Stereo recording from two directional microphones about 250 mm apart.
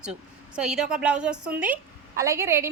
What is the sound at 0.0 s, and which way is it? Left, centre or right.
A woman's voice, centre.